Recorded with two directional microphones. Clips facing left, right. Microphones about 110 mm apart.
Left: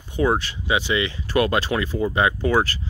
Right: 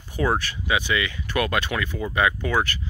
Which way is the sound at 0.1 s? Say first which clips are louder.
Left 3 dB; 25° left (ahead or behind).